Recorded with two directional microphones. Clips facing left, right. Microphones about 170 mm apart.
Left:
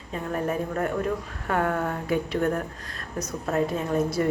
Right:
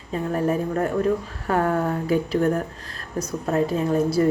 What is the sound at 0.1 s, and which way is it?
A woman's voice, 35° right (ahead or behind).